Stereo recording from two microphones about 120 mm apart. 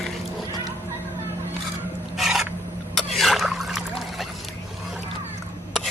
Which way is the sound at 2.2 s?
Centre (ahead or behind).